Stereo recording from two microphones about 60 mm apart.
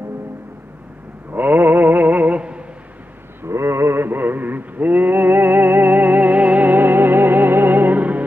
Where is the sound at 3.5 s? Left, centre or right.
Right.